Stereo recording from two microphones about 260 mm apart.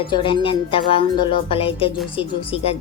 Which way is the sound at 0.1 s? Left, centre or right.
Left.